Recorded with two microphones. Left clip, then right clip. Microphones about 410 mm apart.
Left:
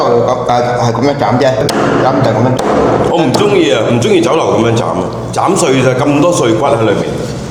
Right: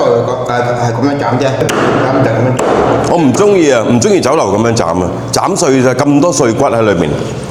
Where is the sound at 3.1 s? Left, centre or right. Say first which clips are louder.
Right 1 dB; right.